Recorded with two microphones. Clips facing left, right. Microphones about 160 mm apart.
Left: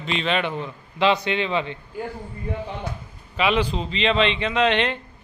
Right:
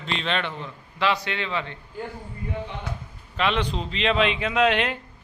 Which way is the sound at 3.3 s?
5° left (ahead or behind).